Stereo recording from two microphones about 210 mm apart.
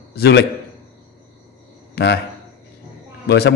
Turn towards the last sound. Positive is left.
turn(degrees=50)  # may be behind; listen again after turning